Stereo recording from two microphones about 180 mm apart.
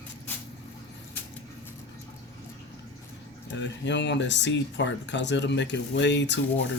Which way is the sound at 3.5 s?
85° left.